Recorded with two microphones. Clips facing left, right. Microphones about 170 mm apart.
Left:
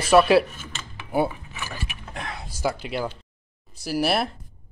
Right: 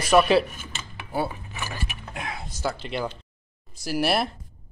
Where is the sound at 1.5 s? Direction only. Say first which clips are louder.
Right 1 dB; 40° right (ahead or behind).